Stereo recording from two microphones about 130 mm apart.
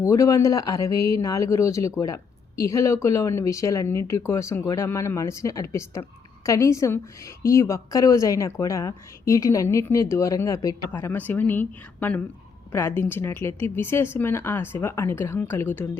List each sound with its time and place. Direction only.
0.0 s a woman's voice: 25° left (ahead or behind)